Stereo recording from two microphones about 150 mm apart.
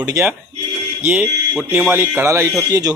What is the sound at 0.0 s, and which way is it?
A man's voice, 20° right (ahead or behind).